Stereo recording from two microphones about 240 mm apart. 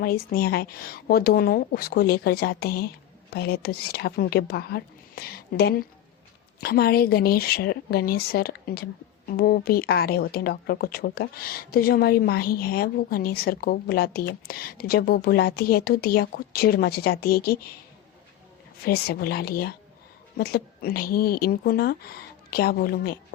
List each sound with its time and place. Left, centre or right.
0.0 s a woman's voice: left
18.9 s a woman's voice: left